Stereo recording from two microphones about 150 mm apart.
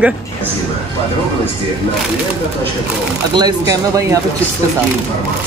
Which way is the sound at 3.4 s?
25° right (ahead or behind).